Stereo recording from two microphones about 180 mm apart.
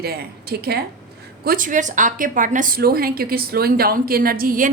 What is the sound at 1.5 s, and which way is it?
A woman's voice, 50° right (ahead or behind).